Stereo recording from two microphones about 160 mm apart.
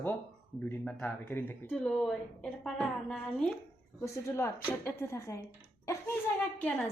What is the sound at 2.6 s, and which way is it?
Speech, 5° left (ahead or behind).